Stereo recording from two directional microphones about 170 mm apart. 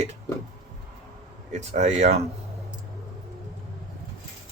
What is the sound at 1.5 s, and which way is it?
Speech, 45° right (ahead or behind).